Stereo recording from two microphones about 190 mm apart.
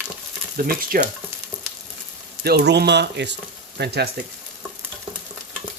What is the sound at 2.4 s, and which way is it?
Speech, 60° right (ahead or behind).